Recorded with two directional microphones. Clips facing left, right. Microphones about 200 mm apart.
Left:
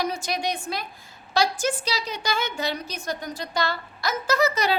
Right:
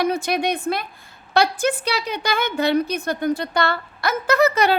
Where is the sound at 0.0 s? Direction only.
60° right (ahead or behind).